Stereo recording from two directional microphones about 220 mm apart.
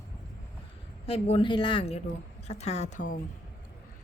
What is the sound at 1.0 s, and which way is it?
A woman's voice, 25° left (ahead or behind).